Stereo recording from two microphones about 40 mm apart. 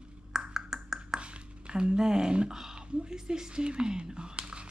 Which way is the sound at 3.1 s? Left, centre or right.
Centre.